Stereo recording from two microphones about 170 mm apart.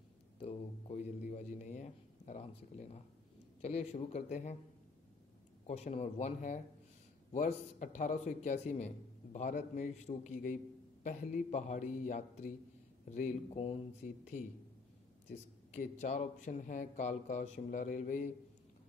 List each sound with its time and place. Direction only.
0.4 s a man's voice: 35° left (ahead or behind)
5.7 s a man's voice: 40° left (ahead or behind)
15.7 s a man's voice: 45° left (ahead or behind)